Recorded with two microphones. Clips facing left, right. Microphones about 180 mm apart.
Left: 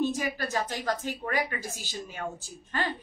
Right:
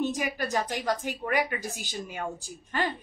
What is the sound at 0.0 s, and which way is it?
A woman's voice, 15° right (ahead or behind).